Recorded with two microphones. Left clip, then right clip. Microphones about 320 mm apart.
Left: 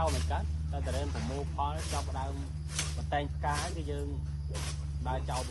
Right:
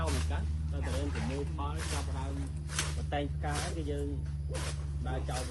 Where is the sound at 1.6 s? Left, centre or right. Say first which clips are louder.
Left 4 dB; centre.